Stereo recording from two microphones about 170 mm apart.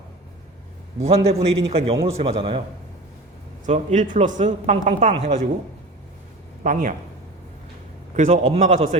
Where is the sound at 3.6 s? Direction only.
45° right (ahead or behind).